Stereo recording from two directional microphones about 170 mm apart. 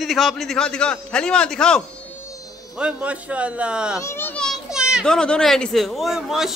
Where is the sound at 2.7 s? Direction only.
5° right (ahead or behind).